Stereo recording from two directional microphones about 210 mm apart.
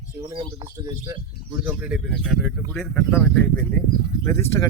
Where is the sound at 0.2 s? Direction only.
20° right (ahead or behind).